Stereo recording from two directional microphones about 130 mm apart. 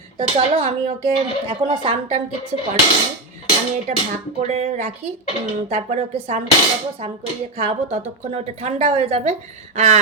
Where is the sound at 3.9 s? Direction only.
70° right (ahead or behind).